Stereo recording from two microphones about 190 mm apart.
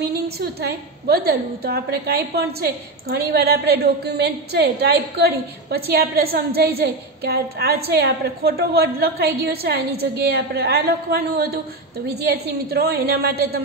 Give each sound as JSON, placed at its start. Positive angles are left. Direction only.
{"t": 0.4, "sound": "a woman's voice", "side_deg": -55}